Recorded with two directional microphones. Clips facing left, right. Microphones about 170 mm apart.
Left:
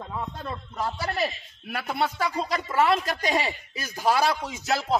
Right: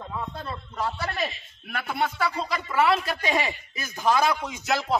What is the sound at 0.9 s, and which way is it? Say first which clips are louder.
A man's voice: left 2 dB; 35° left (ahead or behind).